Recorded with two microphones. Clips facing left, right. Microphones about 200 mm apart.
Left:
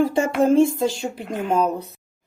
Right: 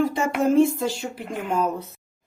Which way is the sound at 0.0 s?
30° left (ahead or behind).